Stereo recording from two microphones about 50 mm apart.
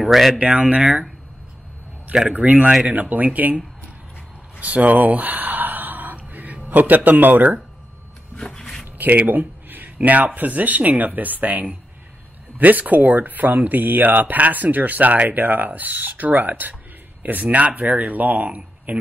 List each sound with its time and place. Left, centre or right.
0.0 s speech: centre
0.4 s speech: right
2.2 s speech: right
4.6 s gasp: right
8.4 s a sound: centre
8.9 s a sound: right
9.9 s speech: right